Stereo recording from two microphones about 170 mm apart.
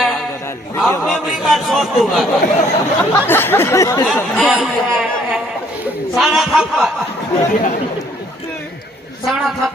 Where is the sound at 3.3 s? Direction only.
15° left (ahead or behind).